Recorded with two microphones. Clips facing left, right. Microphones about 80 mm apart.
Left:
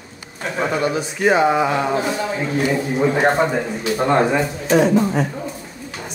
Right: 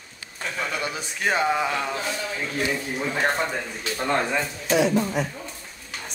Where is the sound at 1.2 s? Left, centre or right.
Centre.